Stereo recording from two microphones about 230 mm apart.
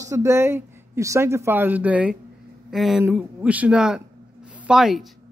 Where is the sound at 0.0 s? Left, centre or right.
Centre.